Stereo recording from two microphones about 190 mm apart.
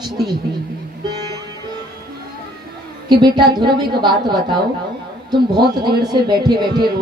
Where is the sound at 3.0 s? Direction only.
25° right (ahead or behind).